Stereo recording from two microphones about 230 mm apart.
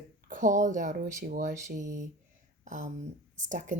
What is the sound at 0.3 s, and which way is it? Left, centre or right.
A woman's voice, right.